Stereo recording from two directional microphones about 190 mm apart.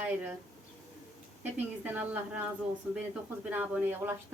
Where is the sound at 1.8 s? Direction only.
10° right (ahead or behind).